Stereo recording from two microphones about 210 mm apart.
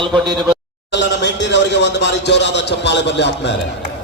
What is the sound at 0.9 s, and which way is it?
A man's voice, 55° left (ahead or behind).